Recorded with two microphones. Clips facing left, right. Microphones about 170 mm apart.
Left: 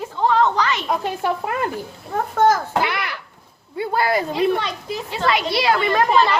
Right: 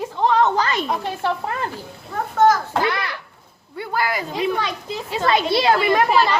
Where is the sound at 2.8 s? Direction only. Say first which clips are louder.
Right 1 dB; 15° left (ahead or behind).